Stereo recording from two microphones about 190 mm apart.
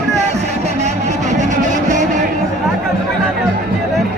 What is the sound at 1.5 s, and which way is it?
Vehicle, 40° right (ahead or behind).